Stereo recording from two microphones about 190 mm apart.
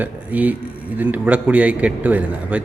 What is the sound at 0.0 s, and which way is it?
A man's voice, 10° right (ahead or behind).